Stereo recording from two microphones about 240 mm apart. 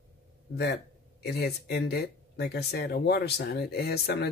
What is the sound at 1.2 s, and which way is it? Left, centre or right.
Speech, left.